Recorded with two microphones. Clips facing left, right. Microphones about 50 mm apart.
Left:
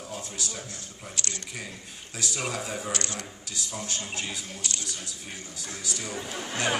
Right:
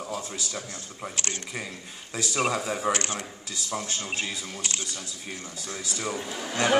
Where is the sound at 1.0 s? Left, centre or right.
Right.